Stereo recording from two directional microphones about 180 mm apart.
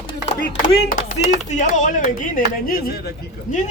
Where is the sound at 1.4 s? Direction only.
40° left (ahead or behind).